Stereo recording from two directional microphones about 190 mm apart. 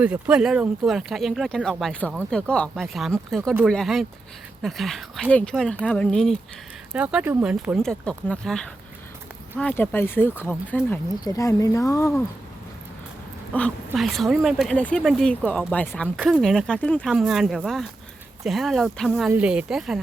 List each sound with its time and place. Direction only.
0.0 s speech: 5° right (ahead or behind)
6.9 s speech: 5° right (ahead or behind); by 12.1 s 15° left (ahead or behind)
13.5 s speech: 5° left (ahead or behind)